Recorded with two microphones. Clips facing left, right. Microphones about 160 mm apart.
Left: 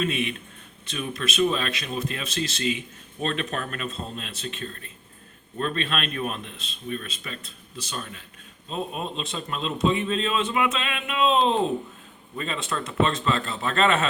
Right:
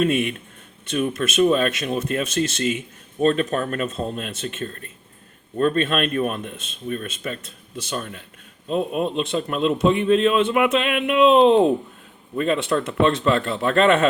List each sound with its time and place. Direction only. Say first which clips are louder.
0.0 s a man's voice: right 7 dB; 50° right (ahead or behind)